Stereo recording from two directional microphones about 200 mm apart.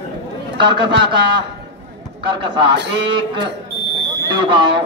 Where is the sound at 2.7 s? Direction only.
60° right (ahead or behind).